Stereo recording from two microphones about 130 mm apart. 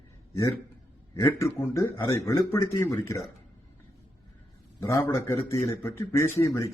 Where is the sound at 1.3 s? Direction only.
20° left (ahead or behind).